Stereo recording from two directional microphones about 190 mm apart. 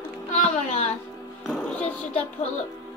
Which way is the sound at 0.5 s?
35° left (ahead or behind).